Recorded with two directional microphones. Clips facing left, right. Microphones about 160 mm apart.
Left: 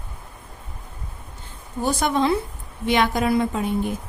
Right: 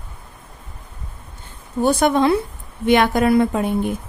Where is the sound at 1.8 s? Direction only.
60° right (ahead or behind).